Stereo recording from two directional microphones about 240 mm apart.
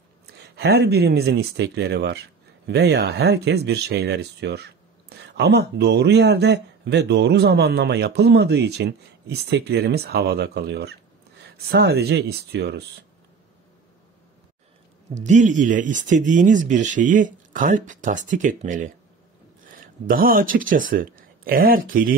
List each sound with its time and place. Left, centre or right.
0.4 s speech: right
15.1 s speech: right